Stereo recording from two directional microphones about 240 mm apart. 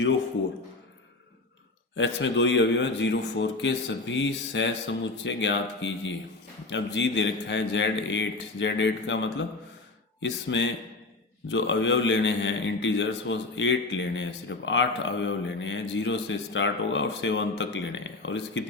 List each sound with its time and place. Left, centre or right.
2.0 s a man's voice: left